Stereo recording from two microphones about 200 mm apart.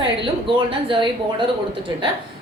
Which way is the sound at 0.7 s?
25° right (ahead or behind).